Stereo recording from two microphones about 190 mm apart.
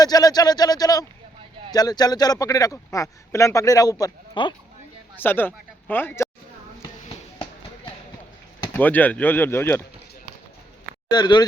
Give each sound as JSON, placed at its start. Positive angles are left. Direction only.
{"t": 0.0, "sound": "a man's voice", "side_deg": 20}
{"t": 5.1, "sound": "speech", "side_deg": 10}
{"t": 8.7, "sound": "speech", "side_deg": 10}
{"t": 11.1, "sound": "a man's voice", "side_deg": 20}